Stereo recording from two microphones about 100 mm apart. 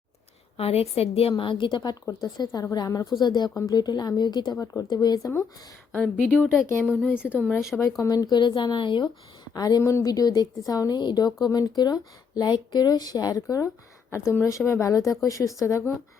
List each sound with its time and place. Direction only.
0.5 s a woman's voice: 85° left
1.4 s speech: 55° left (ahead or behind)
4.5 s a woman's voice: 35° left (ahead or behind)
6.1 s a woman's voice: 10° right (ahead or behind)
7.8 s a woman's voice: 35° left (ahead or behind)
14.1 s a woman's voice: 30° left (ahead or behind)